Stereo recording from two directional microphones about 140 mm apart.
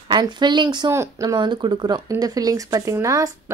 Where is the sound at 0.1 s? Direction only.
30° right (ahead or behind).